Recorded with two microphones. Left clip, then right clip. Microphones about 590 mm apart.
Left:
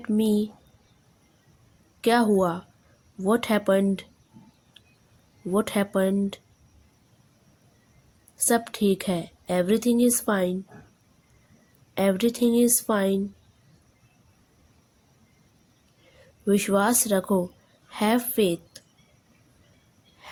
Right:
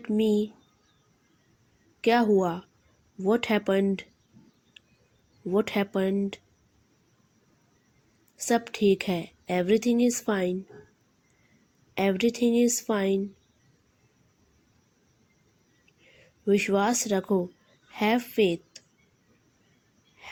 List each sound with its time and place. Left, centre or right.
0.0 s a woman's voice: left
2.0 s a woman's voice: left
5.5 s a woman's voice: left
8.4 s a woman's voice: left
11.9 s a woman's voice: left
16.5 s a woman's voice: left